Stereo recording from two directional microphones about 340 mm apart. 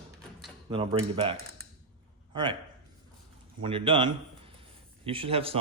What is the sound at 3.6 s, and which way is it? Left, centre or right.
Speech, centre.